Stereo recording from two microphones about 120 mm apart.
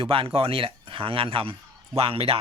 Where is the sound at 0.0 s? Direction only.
50° right (ahead or behind).